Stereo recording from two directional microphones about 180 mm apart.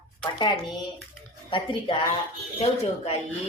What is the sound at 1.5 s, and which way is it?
A woman's voice, 30° left (ahead or behind).